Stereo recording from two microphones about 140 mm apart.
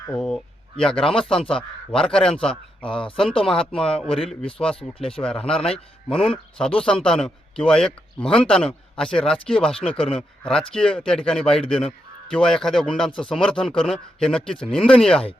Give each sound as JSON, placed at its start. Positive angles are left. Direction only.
{"t": 0.1, "sound": "a man's voice", "side_deg": 5}
{"t": 1.3, "sound": "a man's voice", "side_deg": 40}
{"t": 1.5, "sound": "a man's voice", "side_deg": 5}
{"t": 2.5, "sound": "a man's voice", "side_deg": 35}
{"t": 3.4, "sound": "a man's voice", "side_deg": 5}
{"t": 4.8, "sound": "a man's voice", "side_deg": 40}
{"t": 5.1, "sound": "a man's voice", "side_deg": 5}